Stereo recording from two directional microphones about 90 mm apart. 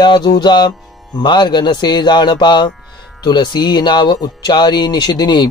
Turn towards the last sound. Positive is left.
turn(degrees=50)  # may be behind; listen again after turning